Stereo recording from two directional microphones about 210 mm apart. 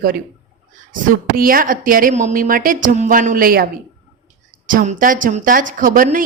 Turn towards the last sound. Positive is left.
turn(degrees=-40)  # may be behind; listen again after turning